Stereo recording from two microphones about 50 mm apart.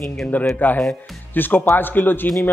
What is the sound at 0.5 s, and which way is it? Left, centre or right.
A man's voice, left.